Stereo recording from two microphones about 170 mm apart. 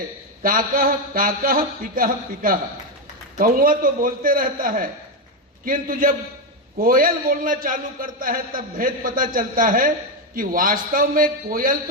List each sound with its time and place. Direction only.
0.4 s a man's voice: 55° right (ahead or behind)